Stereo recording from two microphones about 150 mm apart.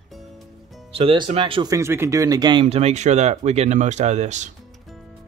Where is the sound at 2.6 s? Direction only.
45° right (ahead or behind).